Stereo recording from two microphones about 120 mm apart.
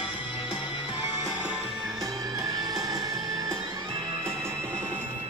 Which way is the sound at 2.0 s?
30° right (ahead or behind).